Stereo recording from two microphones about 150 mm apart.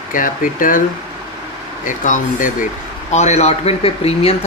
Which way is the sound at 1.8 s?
60° left (ahead or behind).